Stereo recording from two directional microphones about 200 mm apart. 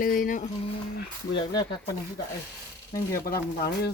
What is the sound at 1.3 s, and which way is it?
Speech, 20° left (ahead or behind).